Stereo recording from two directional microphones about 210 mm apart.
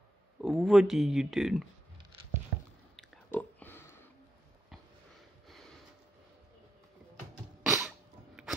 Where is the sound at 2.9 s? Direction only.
5° left (ahead or behind).